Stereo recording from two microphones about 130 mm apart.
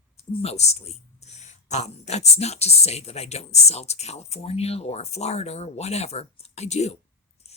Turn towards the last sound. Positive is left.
turn(degrees=60)  # may be behind; listen again after turning